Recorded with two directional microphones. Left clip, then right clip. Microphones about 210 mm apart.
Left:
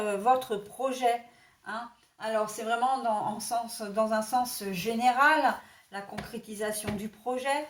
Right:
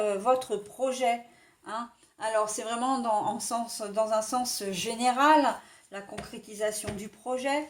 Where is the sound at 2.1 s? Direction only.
50° right (ahead or behind).